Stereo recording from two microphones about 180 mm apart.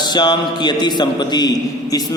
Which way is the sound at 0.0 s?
25° left (ahead or behind).